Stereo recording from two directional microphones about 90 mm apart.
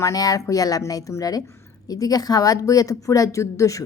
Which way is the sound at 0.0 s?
40° left (ahead or behind).